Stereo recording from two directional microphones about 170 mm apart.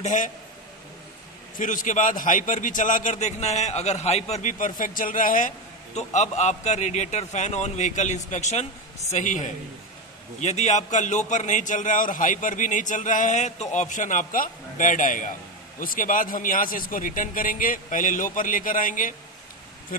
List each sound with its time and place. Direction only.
0.0 s a man's voice: 45° left (ahead or behind)
1.6 s a man's voice: 50° left (ahead or behind)